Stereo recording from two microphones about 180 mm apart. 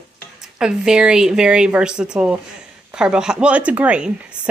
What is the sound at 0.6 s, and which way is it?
A woman's voice, 5° right (ahead or behind).